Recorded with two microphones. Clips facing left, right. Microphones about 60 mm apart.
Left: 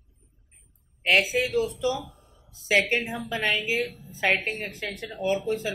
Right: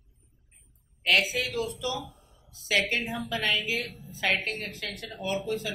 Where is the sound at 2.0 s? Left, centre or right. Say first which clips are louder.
Even; left.